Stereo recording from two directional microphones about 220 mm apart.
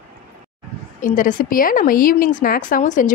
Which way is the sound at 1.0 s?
35° left (ahead or behind).